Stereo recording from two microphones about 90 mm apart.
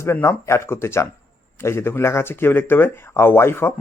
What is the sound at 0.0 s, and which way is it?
Speech, 30° left (ahead or behind).